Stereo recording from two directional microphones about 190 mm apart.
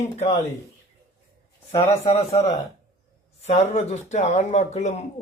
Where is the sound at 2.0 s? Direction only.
35° left (ahead or behind).